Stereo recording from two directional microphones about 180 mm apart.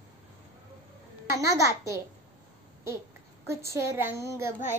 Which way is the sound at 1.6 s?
15° right (ahead or behind).